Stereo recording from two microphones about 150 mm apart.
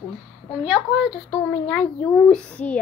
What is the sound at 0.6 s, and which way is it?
Speech, 5° right (ahead or behind).